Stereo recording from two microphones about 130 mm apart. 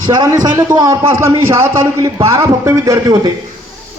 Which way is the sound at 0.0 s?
30° right (ahead or behind).